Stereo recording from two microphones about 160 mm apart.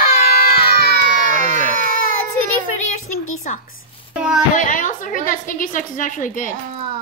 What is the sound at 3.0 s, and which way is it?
A woman's voice, 50° left (ahead or behind).